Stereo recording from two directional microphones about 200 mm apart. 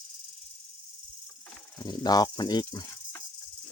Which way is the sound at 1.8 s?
20° left (ahead or behind).